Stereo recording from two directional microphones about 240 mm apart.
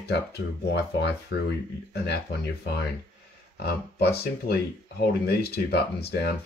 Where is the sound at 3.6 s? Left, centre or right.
Left.